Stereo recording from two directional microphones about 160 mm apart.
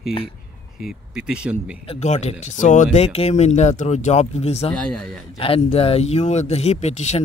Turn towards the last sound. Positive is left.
turn(degrees=45)  # may be behind; listen again after turning